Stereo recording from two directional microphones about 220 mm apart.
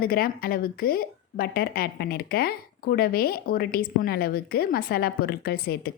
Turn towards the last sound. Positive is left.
turn(degrees=45)  # may be behind; listen again after turning